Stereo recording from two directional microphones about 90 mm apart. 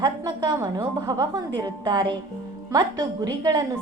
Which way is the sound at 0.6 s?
40° right (ahead or behind).